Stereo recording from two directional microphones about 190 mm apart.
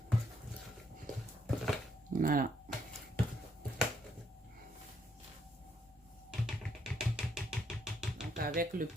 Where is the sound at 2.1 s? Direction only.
45° right (ahead or behind).